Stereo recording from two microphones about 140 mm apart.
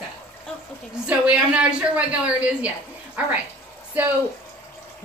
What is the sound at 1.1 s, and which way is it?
A woman's voice, 10° right (ahead or behind).